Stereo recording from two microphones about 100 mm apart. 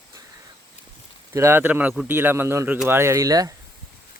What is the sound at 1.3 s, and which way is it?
Speech, 25° right (ahead or behind).